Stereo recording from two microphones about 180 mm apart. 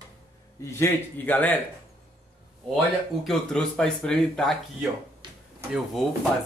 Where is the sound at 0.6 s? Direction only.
15° left (ahead or behind).